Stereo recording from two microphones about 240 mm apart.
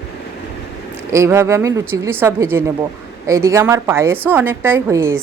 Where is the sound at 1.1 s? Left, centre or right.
Centre.